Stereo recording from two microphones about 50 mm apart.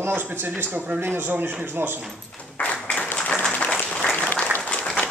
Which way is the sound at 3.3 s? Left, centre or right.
Left.